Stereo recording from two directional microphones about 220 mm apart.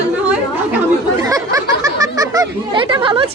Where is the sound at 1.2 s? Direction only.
15° right (ahead or behind).